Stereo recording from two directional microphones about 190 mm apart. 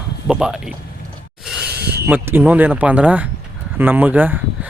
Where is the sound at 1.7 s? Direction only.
55° right (ahead or behind).